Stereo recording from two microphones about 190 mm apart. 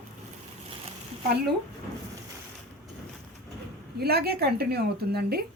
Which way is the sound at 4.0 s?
55° right (ahead or behind).